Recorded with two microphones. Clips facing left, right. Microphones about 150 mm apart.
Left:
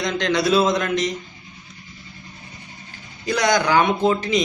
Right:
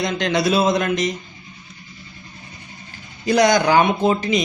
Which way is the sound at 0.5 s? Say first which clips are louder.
Even; 10° right (ahead or behind).